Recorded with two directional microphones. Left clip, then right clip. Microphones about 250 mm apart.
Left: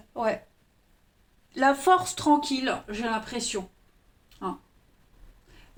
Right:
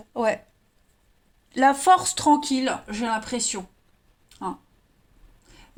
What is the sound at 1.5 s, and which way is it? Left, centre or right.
Speech, right.